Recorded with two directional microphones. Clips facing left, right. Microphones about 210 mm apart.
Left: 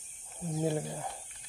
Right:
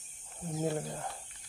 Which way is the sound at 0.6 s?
10° left (ahead or behind).